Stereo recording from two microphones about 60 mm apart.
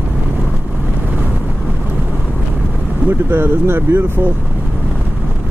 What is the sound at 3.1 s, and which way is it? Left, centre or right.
Speech, right.